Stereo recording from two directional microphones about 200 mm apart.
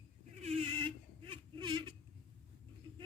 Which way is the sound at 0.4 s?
25° right (ahead or behind).